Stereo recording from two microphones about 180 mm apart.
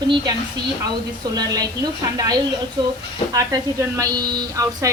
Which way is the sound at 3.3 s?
20° right (ahead or behind).